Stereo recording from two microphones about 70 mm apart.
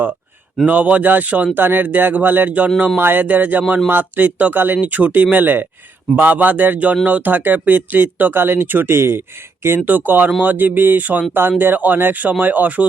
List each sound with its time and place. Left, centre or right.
0.7 s speech: right
2.6 s speech: centre
3.0 s speech: right